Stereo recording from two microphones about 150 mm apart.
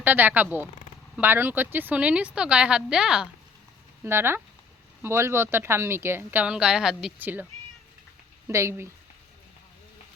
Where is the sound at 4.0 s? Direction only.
15° right (ahead or behind).